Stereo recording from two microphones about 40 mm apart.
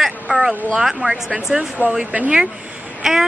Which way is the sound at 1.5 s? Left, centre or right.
Centre.